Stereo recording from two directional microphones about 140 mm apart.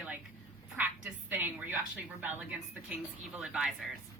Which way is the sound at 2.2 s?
10° right (ahead or behind).